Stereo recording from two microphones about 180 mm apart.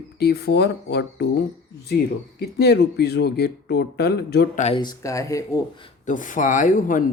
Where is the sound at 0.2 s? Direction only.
65° left (ahead or behind).